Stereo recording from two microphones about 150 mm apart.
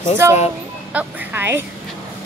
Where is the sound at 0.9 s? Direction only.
10° right (ahead or behind).